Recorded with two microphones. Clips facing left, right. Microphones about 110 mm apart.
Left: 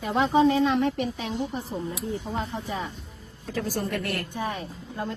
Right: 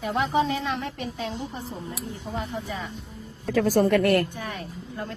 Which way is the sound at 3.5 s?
80° right.